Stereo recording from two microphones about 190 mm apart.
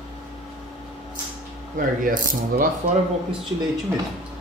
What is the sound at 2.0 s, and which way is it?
Speech, 45° right (ahead or behind).